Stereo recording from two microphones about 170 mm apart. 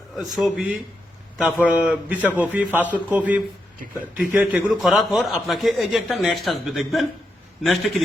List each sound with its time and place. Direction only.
0.2 s a man's voice: centre (ahead or behind)